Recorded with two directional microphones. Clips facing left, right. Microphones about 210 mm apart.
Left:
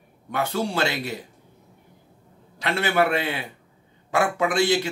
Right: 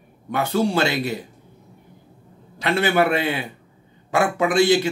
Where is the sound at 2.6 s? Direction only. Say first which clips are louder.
Right 3 dB; 15° right (ahead or behind).